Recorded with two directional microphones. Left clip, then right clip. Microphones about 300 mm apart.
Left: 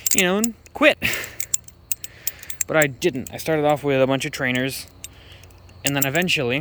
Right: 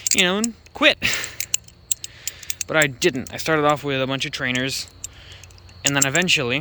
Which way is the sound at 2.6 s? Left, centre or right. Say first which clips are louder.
Even; centre.